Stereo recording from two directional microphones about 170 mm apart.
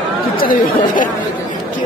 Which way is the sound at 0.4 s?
55° left (ahead or behind).